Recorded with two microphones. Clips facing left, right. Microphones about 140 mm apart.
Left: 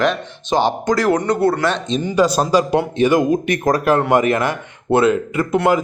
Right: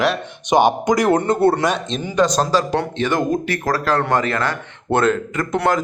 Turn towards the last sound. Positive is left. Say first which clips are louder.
# left 3 dB
turn(degrees=5)  # may be behind; listen again after turning